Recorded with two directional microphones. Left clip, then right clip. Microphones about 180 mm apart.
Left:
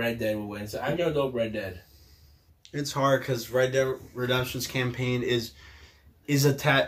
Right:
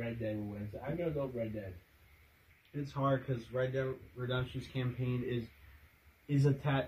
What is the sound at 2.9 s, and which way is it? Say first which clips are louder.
Speech: left 10 dB; 15° left (ahead or behind).